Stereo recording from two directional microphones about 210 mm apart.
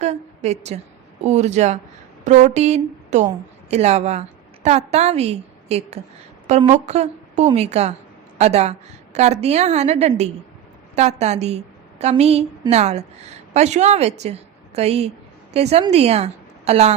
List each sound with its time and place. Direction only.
0.0 s a woman's voice: 30° right (ahead or behind)